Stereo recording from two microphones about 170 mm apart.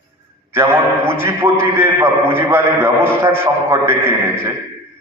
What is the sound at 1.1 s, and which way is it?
A man's voice, 15° right (ahead or behind).